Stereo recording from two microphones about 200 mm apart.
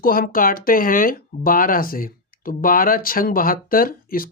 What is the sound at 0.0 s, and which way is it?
Speech, 45° left (ahead or behind).